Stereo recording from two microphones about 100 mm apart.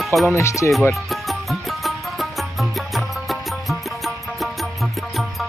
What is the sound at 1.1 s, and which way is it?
Music, centre (ahead or behind).